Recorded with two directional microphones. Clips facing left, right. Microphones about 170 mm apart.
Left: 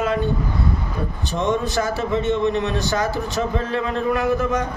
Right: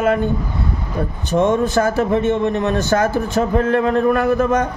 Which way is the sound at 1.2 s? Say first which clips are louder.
Right 6 dB; 50° right (ahead or behind).